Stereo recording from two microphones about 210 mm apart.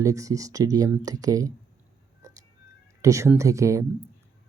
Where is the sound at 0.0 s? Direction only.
15° right (ahead or behind).